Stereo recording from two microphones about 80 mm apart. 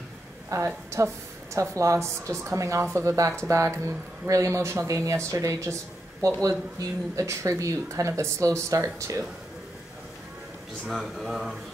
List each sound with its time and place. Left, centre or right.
0.5 s a woman's voice: right
6.8 s a woman's voice: right
10.9 s speech: centre